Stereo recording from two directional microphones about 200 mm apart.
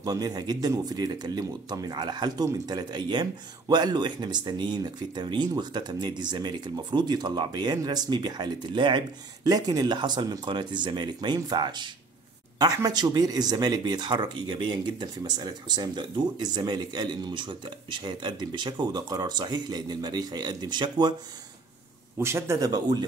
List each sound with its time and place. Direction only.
0.0 s speech: 20° right (ahead or behind)
22.2 s speech: 15° right (ahead or behind)